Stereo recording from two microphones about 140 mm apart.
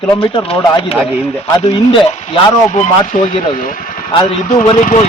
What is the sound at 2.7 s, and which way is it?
Speech, 60° left (ahead or behind).